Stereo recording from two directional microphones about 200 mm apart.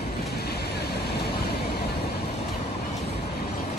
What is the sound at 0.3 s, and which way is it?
Vehicle, 55° left (ahead or behind).